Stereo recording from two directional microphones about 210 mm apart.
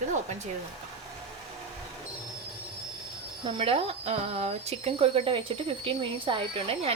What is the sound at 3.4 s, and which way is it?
Speech, 25° right (ahead or behind).